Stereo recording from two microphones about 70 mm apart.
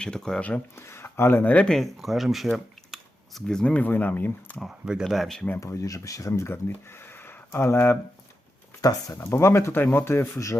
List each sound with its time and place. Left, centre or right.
0.0 s speech: centre
0.8 s speech: left
1.5 s speech: centre
3.8 s speech: left
5.0 s speech: centre
5.5 s speech: left
8.8 s speech: left
9.1 s speech: left